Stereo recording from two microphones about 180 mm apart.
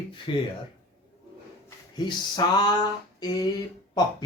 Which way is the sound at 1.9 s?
25° left (ahead or behind).